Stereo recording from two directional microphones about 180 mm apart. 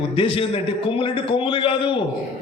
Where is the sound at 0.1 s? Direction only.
30° left (ahead or behind).